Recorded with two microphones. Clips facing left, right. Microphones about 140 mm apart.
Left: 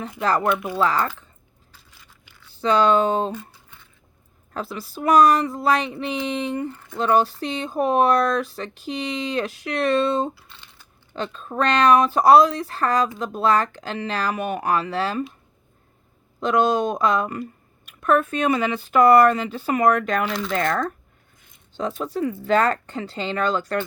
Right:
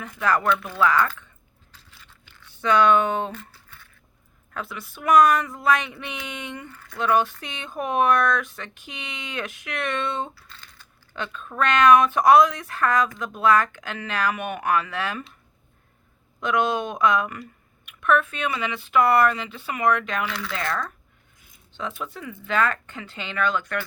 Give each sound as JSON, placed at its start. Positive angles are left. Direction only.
{"t": 0.2, "sound": "speech", "side_deg": 30}
{"t": 0.4, "sound": "speech", "side_deg": 15}
{"t": 0.8, "sound": "speech", "side_deg": 35}
{"t": 1.7, "sound": "biting", "side_deg": 10}
{"t": 2.5, "sound": "speech", "side_deg": 30}
{"t": 3.3, "sound": "a sound", "side_deg": 15}
{"t": 4.5, "sound": "speech", "side_deg": 35}
{"t": 16.4, "sound": "speech", "side_deg": 35}
{"t": 21.8, "sound": "speech", "side_deg": 35}